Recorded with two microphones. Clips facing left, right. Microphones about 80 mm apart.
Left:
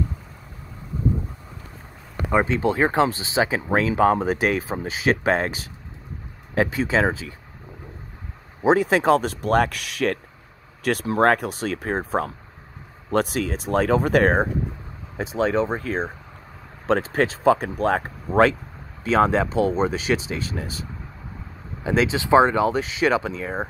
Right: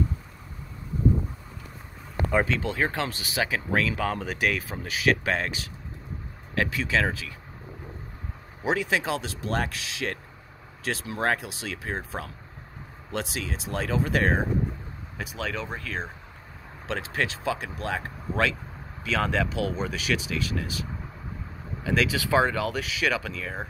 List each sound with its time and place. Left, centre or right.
2.4 s speech: left
8.6 s speech: left
15.1 s speech: left
21.8 s speech: left